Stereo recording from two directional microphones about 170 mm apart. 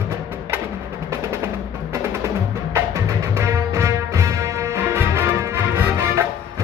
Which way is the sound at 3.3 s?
20° right (ahead or behind).